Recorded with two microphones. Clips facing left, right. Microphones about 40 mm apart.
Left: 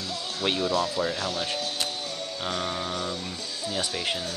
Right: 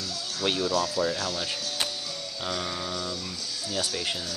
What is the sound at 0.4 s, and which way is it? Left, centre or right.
Speech, left.